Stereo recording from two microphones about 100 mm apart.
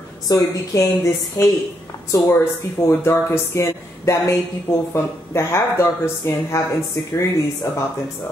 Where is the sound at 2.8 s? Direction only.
25° left (ahead or behind).